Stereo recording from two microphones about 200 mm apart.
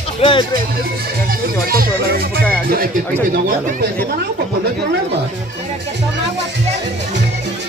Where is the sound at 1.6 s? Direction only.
50° right (ahead or behind).